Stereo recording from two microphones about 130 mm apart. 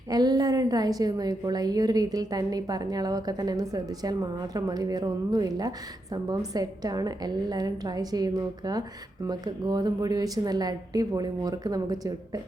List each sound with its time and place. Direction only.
0.1 s a woman's voice: 30° right (ahead or behind)